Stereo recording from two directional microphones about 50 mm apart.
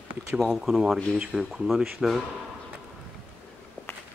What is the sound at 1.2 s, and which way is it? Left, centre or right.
Speech, centre.